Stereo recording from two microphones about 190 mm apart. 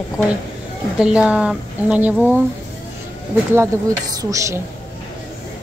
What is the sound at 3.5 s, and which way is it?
Speech, 15° right (ahead or behind).